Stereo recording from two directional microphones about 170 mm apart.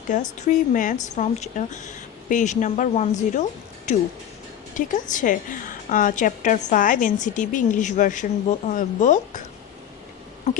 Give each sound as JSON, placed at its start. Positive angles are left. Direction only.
{"t": 0.1, "sound": "a woman's voice", "side_deg": 45}